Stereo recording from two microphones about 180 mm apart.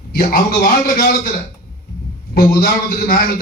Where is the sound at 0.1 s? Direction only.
55° left (ahead or behind).